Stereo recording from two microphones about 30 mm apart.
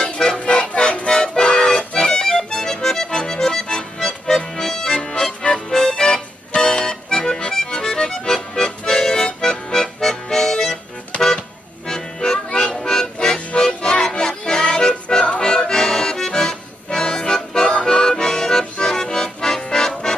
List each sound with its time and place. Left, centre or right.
0.3 s music: left
1.5 s accordion: left
2.0 s accordion: left
3.5 s music: centre
4.5 s accordion: centre
5.7 s music: centre
6.5 s accordion: left
9.4 s music: centre
11.9 s music: centre
15.4 s accordion: left
17.8 s music: left
18.8 s accordion: left